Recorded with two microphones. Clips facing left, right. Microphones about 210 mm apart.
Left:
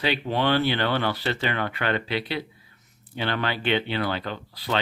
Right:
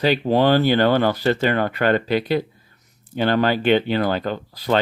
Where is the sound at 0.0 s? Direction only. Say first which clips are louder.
Right 7 dB; 40° right (ahead or behind).